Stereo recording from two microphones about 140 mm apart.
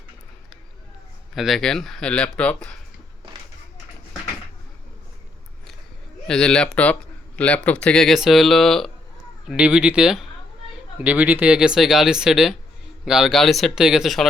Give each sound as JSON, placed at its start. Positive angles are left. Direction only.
{"t": 1.4, "sound": "speech", "side_deg": 0}
{"t": 6.2, "sound": "speech", "side_deg": 5}